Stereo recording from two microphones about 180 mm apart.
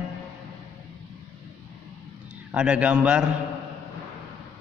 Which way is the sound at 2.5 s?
5° right (ahead or behind).